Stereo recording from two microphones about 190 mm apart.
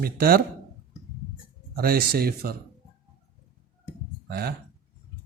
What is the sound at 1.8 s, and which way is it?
Speech, 55° right (ahead or behind).